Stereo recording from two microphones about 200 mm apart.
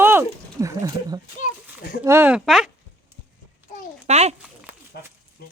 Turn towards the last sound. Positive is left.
turn(degrees=-35)  # may be behind; listen again after turning